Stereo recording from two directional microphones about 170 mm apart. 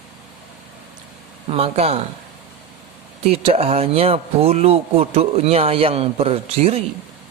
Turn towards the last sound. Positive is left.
turn(degrees=-35)  # may be behind; listen again after turning